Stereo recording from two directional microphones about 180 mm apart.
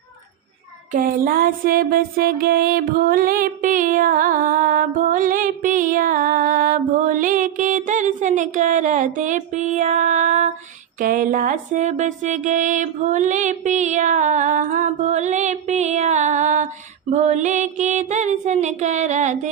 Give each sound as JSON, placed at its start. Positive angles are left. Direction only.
{"t": 0.9, "sound": "music", "side_deg": -50}